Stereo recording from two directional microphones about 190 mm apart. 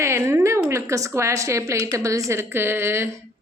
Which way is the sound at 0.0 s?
15° right (ahead or behind).